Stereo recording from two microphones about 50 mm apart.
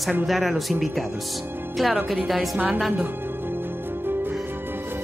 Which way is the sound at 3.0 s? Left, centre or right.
Right.